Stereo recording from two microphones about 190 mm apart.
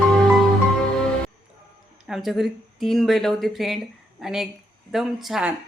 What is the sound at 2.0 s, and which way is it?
A woman's voice, centre (ahead or behind).